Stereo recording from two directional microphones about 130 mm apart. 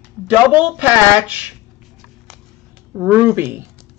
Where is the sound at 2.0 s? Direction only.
Centre (ahead or behind).